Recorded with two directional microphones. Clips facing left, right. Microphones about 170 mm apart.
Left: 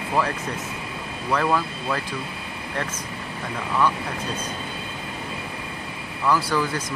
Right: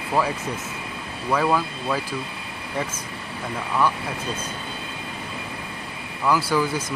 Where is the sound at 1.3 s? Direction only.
5° right (ahead or behind).